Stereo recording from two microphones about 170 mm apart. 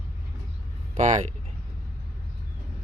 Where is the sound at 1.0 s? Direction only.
45° right (ahead or behind).